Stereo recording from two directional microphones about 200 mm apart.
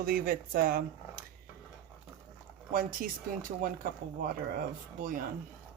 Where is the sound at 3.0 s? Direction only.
50° right (ahead or behind).